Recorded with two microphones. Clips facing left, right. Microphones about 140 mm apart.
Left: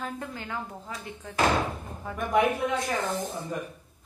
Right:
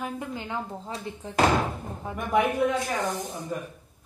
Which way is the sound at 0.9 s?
30° right (ahead or behind).